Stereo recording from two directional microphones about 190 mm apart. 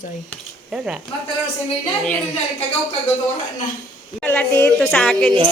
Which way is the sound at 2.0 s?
5° left (ahead or behind).